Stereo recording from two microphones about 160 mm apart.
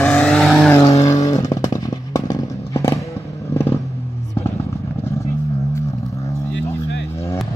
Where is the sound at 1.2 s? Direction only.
20° left (ahead or behind).